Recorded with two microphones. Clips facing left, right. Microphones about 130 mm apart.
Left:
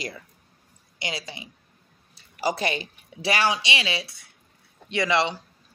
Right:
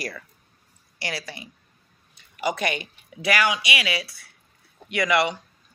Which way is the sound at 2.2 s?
35° left (ahead or behind).